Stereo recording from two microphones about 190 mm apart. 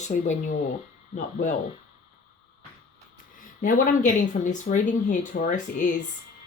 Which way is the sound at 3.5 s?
45° left (ahead or behind).